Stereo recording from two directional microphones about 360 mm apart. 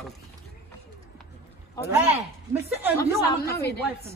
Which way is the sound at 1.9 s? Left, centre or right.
Centre.